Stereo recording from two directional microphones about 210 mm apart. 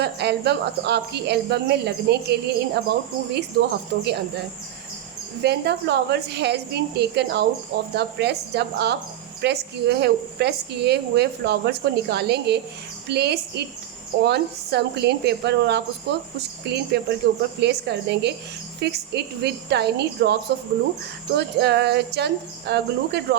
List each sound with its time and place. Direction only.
0.0 s a woman's voice: 50° right (ahead or behind)
5.4 s a woman's voice: 50° right (ahead or behind)